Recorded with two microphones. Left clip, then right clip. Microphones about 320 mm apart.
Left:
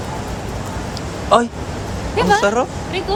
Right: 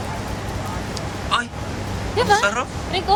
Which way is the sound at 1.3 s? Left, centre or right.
Centre.